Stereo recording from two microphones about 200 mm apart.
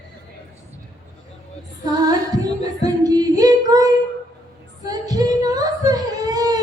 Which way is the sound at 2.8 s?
20° right (ahead or behind).